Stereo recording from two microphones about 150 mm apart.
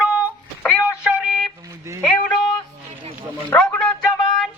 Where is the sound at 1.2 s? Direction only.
Centre (ahead or behind).